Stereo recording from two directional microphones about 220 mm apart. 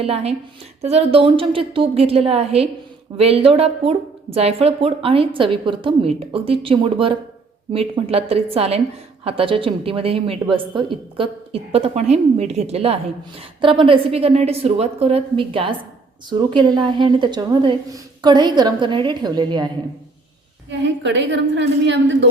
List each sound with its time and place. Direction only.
0.0 s a woman's voice: 25° right (ahead or behind)
20.7 s a woman's voice: 55° right (ahead or behind)